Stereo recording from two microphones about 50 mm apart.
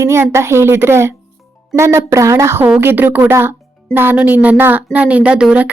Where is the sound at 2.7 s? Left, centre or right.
Right.